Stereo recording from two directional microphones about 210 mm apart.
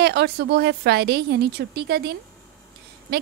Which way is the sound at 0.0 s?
50° right (ahead or behind).